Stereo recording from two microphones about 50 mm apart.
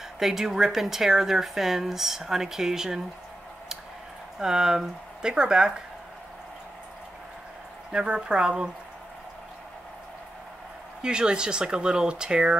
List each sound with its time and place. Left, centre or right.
0.2 s speech: centre
4.4 s speech: centre
7.9 s speech: centre
11.0 s speech: centre